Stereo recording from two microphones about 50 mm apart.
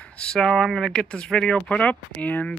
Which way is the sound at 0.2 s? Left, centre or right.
Centre.